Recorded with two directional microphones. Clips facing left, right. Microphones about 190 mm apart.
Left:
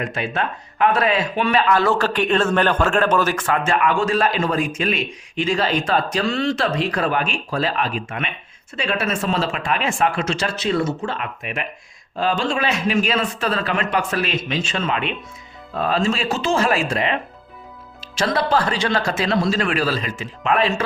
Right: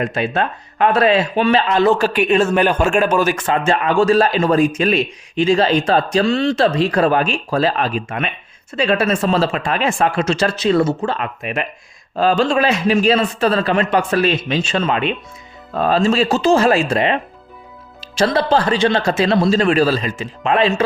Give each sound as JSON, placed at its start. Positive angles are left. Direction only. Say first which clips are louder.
{"t": 0.1, "sound": "speech", "louder": "right 5 dB", "side_deg": -35}